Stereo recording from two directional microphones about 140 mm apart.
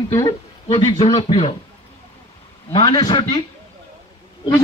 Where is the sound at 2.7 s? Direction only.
35° left (ahead or behind).